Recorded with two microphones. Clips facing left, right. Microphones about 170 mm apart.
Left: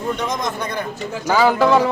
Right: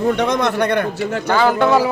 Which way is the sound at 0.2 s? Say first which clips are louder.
Right 7 dB; 65° right (ahead or behind).